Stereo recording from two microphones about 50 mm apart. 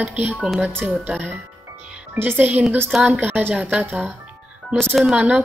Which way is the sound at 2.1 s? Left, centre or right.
Right.